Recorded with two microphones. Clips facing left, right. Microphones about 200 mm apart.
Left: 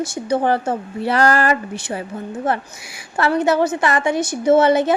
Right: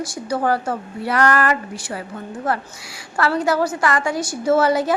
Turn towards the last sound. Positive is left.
turn(degrees=25)  # may be behind; listen again after turning